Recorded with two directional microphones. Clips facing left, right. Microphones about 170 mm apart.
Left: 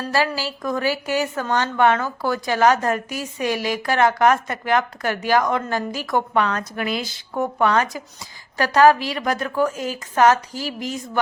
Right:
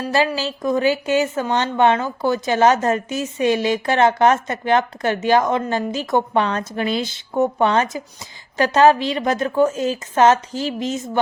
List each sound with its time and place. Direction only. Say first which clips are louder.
0.0 s a woman's voice: right 3 dB; 15° right (ahead or behind)